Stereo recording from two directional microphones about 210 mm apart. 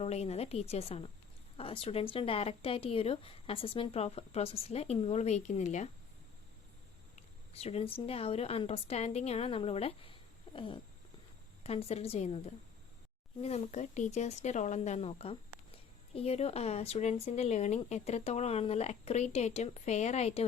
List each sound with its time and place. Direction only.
0.0 s speech: 30° left (ahead or behind)
7.5 s speech: 30° left (ahead or behind)
13.4 s speech: 30° left (ahead or behind)